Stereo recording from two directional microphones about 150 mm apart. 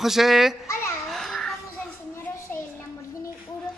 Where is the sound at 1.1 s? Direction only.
Centre (ahead or behind).